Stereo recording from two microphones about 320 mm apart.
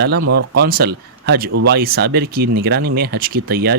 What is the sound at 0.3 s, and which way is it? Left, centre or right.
Speech, right.